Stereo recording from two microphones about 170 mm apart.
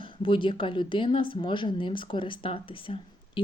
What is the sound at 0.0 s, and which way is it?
Speech, 30° left (ahead or behind).